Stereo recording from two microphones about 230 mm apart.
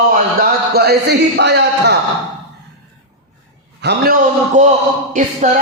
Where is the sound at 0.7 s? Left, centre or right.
Right.